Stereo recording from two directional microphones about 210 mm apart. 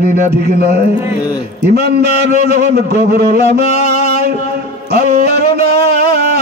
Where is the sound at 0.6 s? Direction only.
50° right (ahead or behind).